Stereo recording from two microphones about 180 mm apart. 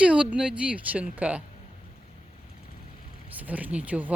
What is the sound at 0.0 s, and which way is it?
Speech, 5° right (ahead or behind).